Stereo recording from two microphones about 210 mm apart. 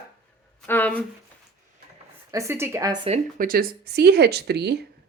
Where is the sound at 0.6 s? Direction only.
10° left (ahead or behind).